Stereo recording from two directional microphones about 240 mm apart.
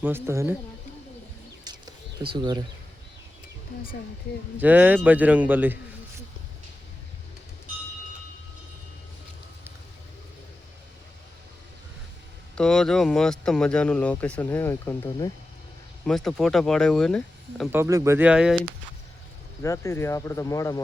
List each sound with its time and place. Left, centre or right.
0.0 s speech: centre
1.6 s bird: centre
2.3 s speech: centre
4.5 s speech: centre
12.5 s speech: centre
17.7 s speech: centre
19.6 s speech: centre